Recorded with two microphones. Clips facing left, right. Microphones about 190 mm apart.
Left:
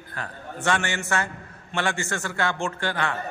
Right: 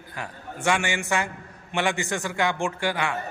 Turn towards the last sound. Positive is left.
turn(degrees=-10)  # may be behind; listen again after turning